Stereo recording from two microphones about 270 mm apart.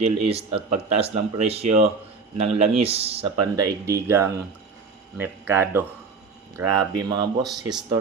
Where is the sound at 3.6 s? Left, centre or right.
Centre.